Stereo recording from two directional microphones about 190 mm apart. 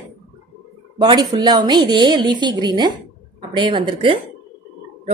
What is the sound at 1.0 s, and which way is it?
A woman's voice, 20° right (ahead or behind).